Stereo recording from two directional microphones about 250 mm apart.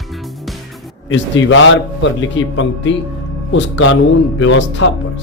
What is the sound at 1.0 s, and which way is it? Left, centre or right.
A man's voice, left.